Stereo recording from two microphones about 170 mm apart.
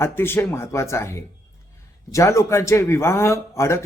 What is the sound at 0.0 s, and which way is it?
A man's voice, 15° left (ahead or behind).